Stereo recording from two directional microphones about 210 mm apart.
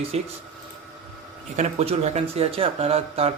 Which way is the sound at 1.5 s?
30° right (ahead or behind).